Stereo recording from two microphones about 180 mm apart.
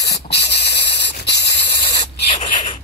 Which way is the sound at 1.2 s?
70° left (ahead or behind).